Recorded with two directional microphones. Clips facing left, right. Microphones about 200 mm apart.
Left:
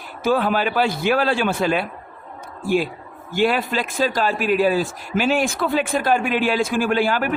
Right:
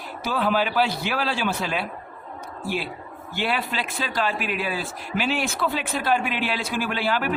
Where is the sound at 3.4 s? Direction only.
45° left (ahead or behind).